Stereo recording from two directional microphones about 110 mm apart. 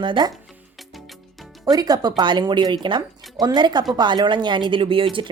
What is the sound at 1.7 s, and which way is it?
Speech, 35° right (ahead or behind).